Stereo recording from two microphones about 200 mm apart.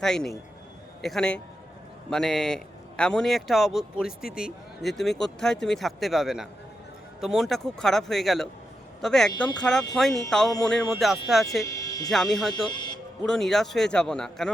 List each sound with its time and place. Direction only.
0.0 s speech: 5° left (ahead or behind)
11.6 s speech: 15° left (ahead or behind)
12.1 s speech: centre (ahead or behind)
12.6 s music: 20° left (ahead or behind)
13.2 s speech: centre (ahead or behind)